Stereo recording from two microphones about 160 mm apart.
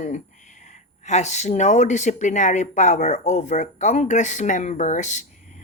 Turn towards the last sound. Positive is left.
turn(degrees=50)  # may be behind; listen again after turning